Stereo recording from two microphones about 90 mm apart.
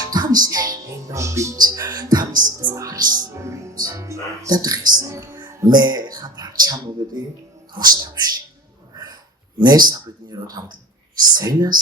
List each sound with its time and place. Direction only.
0.0 s music: 45° right (ahead or behind)
1.5 s music: 50° right (ahead or behind)
3.3 s music: 35° right (ahead or behind)
3.8 s speech: 35° right (ahead or behind)
5.0 s speech: 35° right (ahead or behind)
9.6 s a sound: 50° right (ahead or behind)
11.3 s speech: 45° right (ahead or behind)